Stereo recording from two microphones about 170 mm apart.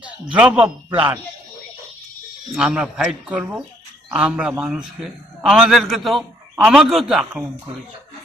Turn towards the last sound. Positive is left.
turn(degrees=0)  # may be behind; listen again after turning